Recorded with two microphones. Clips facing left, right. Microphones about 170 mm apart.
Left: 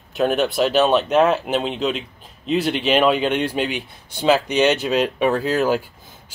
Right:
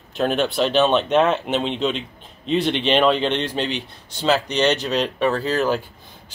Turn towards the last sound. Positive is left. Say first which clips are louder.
# left 2 dB
turn(degrees=10)  # may be behind; listen again after turning